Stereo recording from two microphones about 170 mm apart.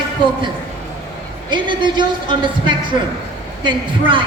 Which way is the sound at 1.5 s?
25° right (ahead or behind).